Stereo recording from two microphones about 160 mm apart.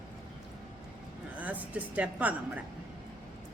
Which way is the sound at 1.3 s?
10° right (ahead or behind).